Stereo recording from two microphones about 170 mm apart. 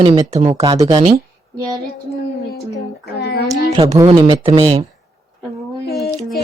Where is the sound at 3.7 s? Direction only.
20° right (ahead or behind).